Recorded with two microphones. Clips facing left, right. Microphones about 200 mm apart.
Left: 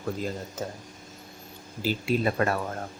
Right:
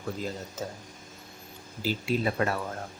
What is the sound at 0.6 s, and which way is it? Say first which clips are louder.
Speech: left 2 dB; 50° left (ahead or behind).